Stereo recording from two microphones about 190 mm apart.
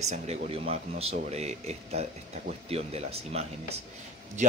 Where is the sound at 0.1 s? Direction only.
35° right (ahead or behind).